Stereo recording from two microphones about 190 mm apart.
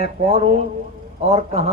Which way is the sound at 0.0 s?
35° right (ahead or behind).